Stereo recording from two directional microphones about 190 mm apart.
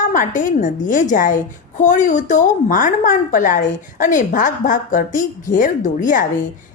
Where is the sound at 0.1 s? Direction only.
45° left (ahead or behind).